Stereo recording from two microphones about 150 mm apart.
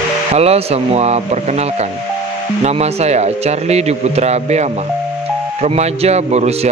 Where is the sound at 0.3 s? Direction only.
45° right (ahead or behind).